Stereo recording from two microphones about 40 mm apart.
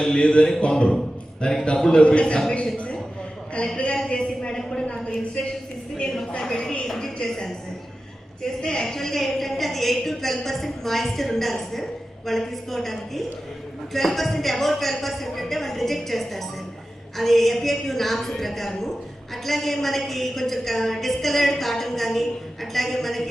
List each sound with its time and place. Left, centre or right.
0.0 s a man's voice: left
6.4 s a woman's voice: centre
8.6 s a woman's voice: centre